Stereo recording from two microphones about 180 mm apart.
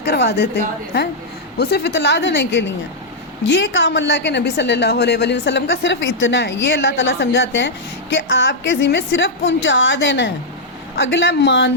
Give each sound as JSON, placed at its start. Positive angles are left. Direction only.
{"t": 0.0, "sound": "a woman's voice", "side_deg": 65}
{"t": 1.5, "sound": "a woman's voice", "side_deg": 65}